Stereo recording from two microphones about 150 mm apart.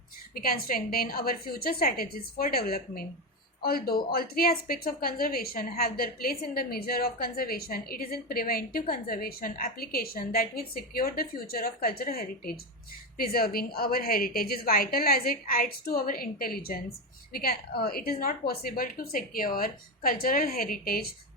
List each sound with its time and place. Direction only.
0.3 s a woman's voice: 75° left (ahead or behind)